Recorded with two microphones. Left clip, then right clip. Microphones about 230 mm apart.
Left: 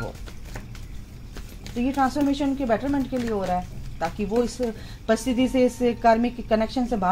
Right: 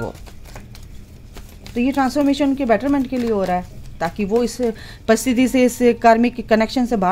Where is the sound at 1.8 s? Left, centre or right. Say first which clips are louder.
Right 5 dB; right.